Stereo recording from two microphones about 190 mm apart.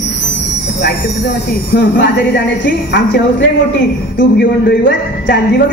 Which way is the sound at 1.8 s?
60° left (ahead or behind).